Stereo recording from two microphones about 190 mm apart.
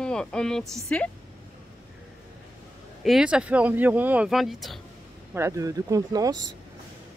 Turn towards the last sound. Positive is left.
turn(degrees=-20)  # may be behind; listen again after turning